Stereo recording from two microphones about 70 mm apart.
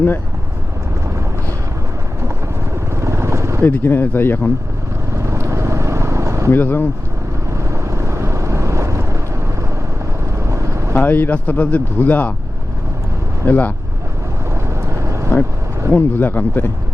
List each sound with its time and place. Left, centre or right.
2.9 s vehicle: right
3.6 s speech: left
5.1 s vehicle: right
6.5 s speech: left
7.5 s vehicle: right
10.4 s vehicle: right
10.9 s speech: left
13.4 s speech: left
14.5 s vehicle: right
15.9 s speech: left